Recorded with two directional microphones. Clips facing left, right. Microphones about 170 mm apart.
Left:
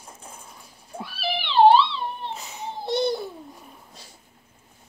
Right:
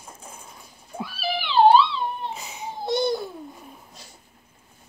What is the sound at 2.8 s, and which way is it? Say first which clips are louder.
Babbling: even; 30° left (ahead or behind).